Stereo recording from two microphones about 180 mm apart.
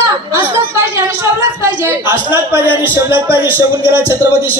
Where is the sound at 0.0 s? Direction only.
15° right (ahead or behind).